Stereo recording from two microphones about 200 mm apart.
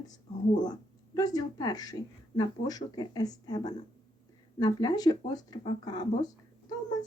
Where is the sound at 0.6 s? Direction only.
20° left (ahead or behind).